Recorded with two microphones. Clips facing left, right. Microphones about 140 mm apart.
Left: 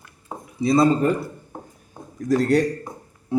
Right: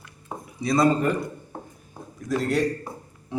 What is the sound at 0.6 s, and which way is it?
Speech, 25° left (ahead or behind).